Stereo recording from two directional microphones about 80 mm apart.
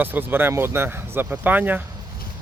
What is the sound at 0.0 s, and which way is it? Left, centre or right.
Speech, right.